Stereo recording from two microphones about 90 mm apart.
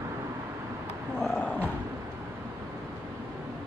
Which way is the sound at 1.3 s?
15° left (ahead or behind).